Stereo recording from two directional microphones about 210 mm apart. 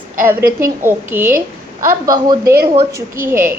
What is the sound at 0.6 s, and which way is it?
A woman's voice, 10° right (ahead or behind).